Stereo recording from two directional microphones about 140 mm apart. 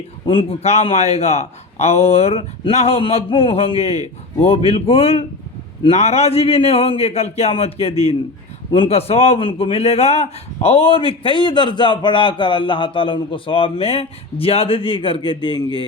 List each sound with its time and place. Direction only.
0.3 s a man's voice: 40° left (ahead or behind)